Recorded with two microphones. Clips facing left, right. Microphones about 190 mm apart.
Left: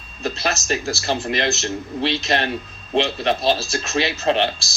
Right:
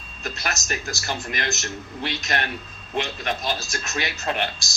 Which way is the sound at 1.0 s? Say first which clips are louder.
Left 7 dB; 25° left (ahead or behind).